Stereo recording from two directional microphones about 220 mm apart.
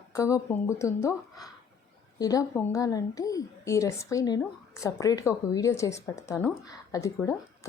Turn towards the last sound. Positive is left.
turn(degrees=15)  # may be behind; listen again after turning